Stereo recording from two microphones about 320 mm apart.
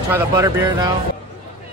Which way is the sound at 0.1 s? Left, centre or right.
Centre.